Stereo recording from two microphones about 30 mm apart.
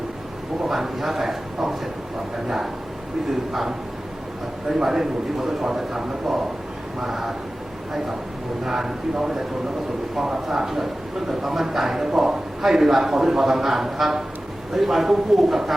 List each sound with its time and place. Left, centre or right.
0.7 s a man's voice: centre
4.8 s a man's voice: centre
8.6 s a man's voice: centre
10.5 s a man's voice: centre